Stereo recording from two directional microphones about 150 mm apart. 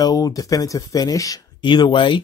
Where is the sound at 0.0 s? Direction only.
25° left (ahead or behind).